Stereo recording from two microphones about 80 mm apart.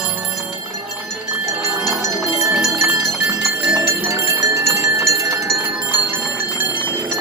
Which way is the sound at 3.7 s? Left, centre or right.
Right.